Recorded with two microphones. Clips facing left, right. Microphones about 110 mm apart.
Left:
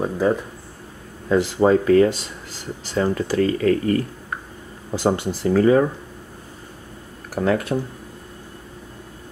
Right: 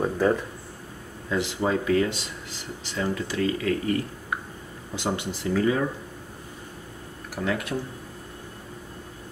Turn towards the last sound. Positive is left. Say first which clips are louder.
# left 7 dB
turn(degrees=40)  # may be behind; listen again after turning